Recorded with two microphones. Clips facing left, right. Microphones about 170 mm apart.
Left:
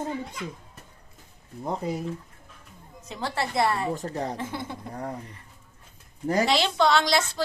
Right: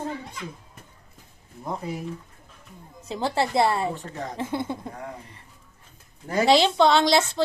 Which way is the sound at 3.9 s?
35° left (ahead or behind).